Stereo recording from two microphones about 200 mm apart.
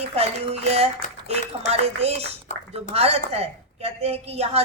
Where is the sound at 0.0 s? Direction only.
30° right (ahead or behind).